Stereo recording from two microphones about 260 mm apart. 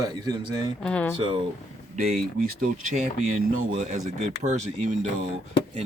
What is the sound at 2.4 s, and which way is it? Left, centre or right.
Speech, right.